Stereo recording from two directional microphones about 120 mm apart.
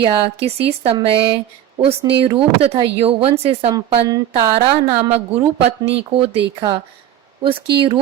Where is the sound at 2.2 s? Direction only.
50° right (ahead or behind).